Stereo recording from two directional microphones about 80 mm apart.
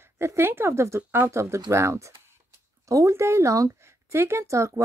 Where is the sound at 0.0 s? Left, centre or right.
Right.